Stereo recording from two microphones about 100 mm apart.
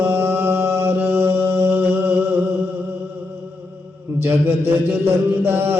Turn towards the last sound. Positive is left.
turn(degrees=-20)  # may be behind; listen again after turning